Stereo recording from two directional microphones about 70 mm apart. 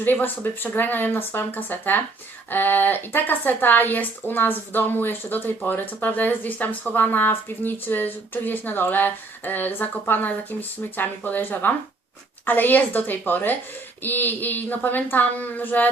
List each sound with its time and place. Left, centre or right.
0.0 s speech: left